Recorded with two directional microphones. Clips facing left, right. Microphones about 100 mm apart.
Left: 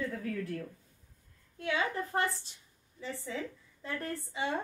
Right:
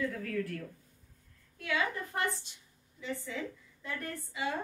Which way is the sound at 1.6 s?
30° left (ahead or behind).